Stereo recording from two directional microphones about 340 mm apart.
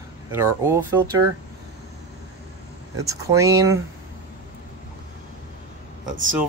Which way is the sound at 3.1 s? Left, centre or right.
Centre.